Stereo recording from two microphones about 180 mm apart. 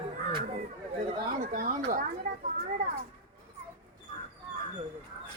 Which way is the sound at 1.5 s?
45° right (ahead or behind).